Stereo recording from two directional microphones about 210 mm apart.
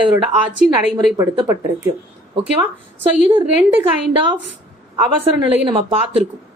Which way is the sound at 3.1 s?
5° right (ahead or behind).